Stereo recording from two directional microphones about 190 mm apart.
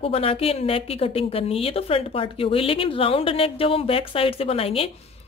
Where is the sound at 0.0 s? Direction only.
30° left (ahead or behind).